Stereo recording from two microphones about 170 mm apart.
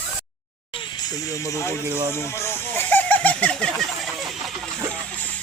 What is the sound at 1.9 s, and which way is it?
Speech, 15° right (ahead or behind).